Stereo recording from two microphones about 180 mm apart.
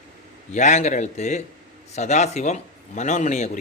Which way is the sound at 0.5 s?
40° left (ahead or behind).